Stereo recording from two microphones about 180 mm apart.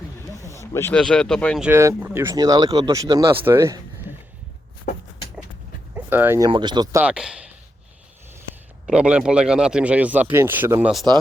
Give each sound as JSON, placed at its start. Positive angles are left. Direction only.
{"t": 0.3, "sound": "a sound", "side_deg": -15}
{"t": 0.7, "sound": "speech", "side_deg": 15}
{"t": 1.6, "sound": "speech", "side_deg": -15}
{"t": 5.9, "sound": "speech", "side_deg": -10}
{"t": 6.5, "sound": "speech", "side_deg": -25}
{"t": 7.0, "sound": "speech", "side_deg": -5}
{"t": 8.9, "sound": "speech", "side_deg": -5}